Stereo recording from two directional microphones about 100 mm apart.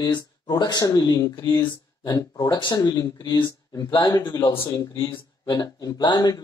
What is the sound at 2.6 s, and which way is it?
Speech, 45° left (ahead or behind).